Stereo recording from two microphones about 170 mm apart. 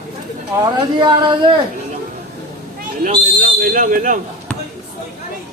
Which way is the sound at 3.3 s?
60° right (ahead or behind).